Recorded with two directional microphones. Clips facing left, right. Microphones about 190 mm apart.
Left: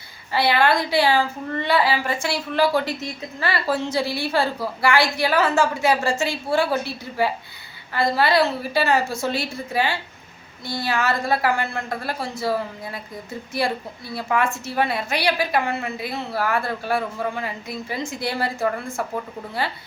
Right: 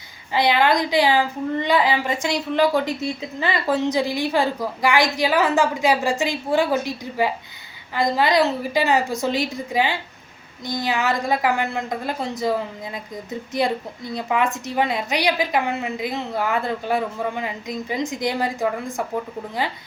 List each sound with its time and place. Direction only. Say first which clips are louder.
0.3 s a woman's voice: right 1 dB; 15° right (ahead or behind)